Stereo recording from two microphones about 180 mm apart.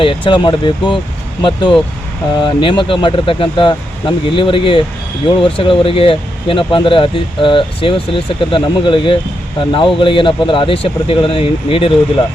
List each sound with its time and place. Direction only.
0.0 s speech: 25° left (ahead or behind)